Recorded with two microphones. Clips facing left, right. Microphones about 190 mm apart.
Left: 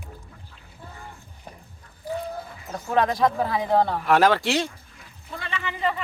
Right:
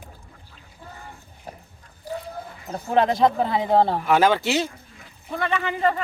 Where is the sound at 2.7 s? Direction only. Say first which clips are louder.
Right 2 dB; 20° right (ahead or behind).